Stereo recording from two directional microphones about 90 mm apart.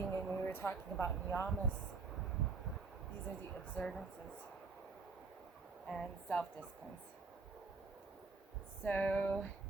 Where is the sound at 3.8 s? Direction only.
5° left (ahead or behind).